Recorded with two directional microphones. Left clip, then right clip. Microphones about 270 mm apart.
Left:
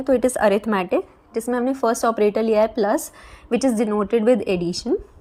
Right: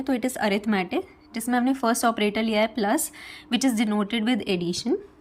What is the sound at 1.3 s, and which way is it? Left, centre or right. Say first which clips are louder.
A woman's voice: left 3 dB; centre.